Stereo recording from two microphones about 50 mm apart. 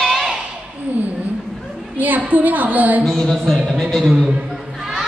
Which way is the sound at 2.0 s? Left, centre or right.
Right.